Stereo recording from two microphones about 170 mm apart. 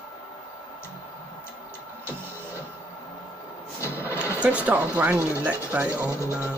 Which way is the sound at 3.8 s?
15° left (ahead or behind).